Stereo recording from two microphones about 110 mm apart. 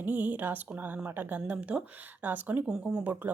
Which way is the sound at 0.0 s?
15° right (ahead or behind).